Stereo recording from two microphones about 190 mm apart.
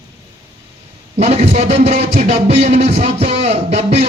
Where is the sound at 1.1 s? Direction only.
35° right (ahead or behind).